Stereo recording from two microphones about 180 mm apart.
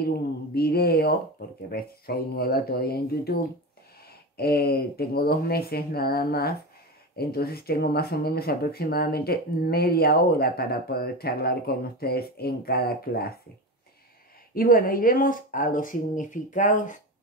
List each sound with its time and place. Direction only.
0.6 s speech: 60° left (ahead or behind)
14.5 s speech: 55° left (ahead or behind)